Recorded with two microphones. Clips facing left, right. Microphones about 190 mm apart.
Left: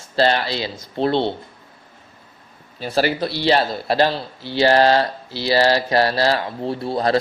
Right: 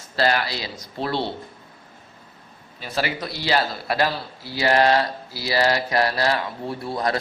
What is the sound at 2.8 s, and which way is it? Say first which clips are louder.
Speech: left 7 dB; 30° left (ahead or behind).